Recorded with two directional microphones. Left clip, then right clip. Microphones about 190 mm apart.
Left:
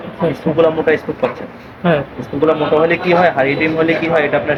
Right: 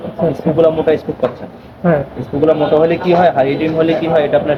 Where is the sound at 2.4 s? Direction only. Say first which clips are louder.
Right 2 dB; centre (ahead or behind).